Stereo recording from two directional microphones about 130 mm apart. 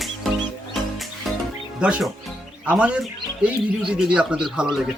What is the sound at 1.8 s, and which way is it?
Speech, 10° right (ahead or behind).